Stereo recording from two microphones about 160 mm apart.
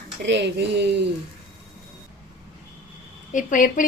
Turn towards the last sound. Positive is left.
turn(degrees=55)  # may be behind; listen again after turning